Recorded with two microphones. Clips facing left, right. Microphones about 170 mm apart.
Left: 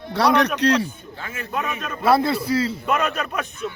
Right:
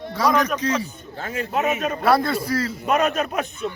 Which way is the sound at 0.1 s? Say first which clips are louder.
Left 2 dB; 70° left (ahead or behind).